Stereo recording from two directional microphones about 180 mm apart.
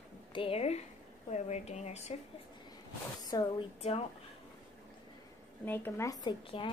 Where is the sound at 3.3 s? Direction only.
20° left (ahead or behind).